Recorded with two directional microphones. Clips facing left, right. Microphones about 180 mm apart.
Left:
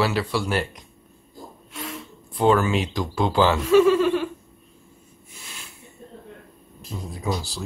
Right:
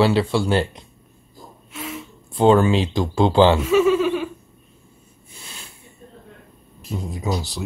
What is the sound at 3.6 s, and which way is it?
Chuckle, 5° right (ahead or behind).